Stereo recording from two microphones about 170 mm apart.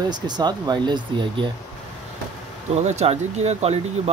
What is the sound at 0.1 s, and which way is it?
Speech, 25° right (ahead or behind).